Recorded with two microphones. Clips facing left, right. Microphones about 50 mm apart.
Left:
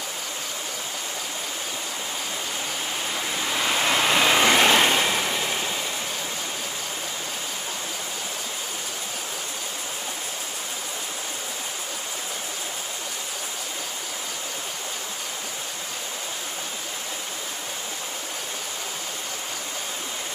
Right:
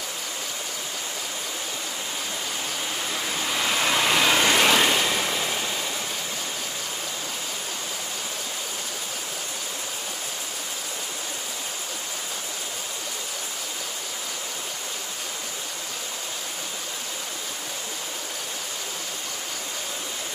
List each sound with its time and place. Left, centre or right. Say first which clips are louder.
3.5 s vehicle: left 1 dB; centre
4.5 s vehicle: left 1 dB; left